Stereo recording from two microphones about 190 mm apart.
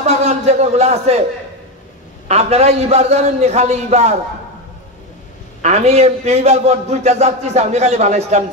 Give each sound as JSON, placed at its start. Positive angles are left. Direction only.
{"t": 0.0, "sound": "speech", "side_deg": -35}
{"t": 2.2, "sound": "a man's voice", "side_deg": -35}
{"t": 5.6, "sound": "a man's voice", "side_deg": -35}